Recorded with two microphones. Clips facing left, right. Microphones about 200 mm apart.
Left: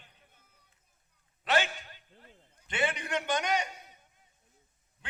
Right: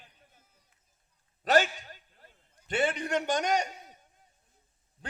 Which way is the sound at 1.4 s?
40° right (ahead or behind).